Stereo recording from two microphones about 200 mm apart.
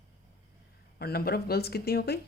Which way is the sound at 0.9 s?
50° left (ahead or behind).